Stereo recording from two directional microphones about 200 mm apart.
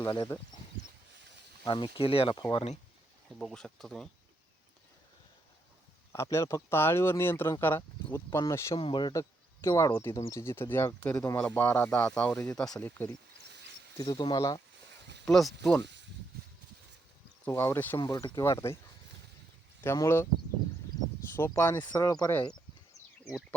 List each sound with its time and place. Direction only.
0.0 s speech: 20° left (ahead or behind)
1.6 s speech: 25° left (ahead or behind)
3.2 s speech: centre (ahead or behind)
6.1 s speech: 15° left (ahead or behind)
15.2 s speech: centre (ahead or behind)
17.4 s speech: 10° left (ahead or behind)
19.8 s speech: 10° left (ahead or behind)
21.3 s speech: 10° left (ahead or behind)